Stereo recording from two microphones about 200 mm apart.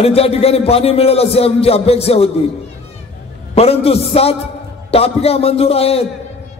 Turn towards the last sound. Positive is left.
turn(degrees=30)  # may be behind; listen again after turning